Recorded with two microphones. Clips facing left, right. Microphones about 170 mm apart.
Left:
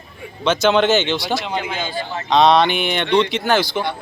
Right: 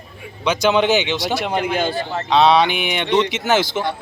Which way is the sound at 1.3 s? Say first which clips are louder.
Right 3 dB; 65° right (ahead or behind).